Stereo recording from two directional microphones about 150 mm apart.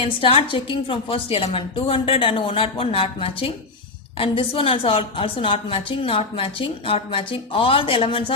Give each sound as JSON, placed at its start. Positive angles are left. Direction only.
{"t": 0.0, "sound": "a woman's voice", "side_deg": 35}